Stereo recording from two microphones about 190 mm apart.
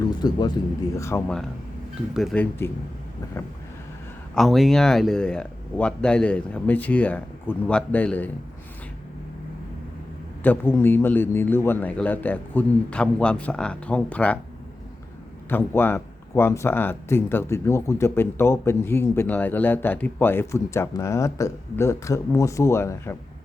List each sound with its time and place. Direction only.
0.1 s speech: 25° left (ahead or behind)
2.1 s speech: 5° left (ahead or behind)
4.4 s speech: centre (ahead or behind)
10.4 s speech: 10° left (ahead or behind)
15.4 s speech: 10° left (ahead or behind)